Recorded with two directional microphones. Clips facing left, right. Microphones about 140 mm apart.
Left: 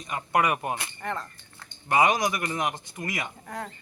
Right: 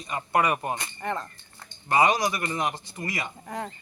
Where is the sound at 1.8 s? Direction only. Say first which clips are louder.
Even; 15° left (ahead or behind).